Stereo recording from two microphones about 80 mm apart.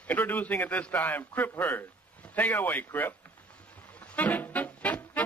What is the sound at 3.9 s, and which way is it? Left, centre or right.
Music, centre.